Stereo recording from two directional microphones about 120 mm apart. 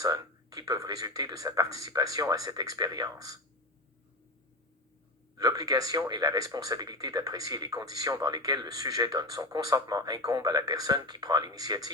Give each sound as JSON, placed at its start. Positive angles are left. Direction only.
{"t": 0.0, "sound": "speech", "side_deg": -30}
{"t": 5.4, "sound": "speech", "side_deg": -30}